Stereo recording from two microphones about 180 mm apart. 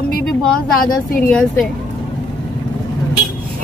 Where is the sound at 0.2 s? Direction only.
5° left (ahead or behind).